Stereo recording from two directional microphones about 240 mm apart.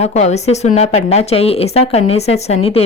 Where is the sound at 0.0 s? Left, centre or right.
Left.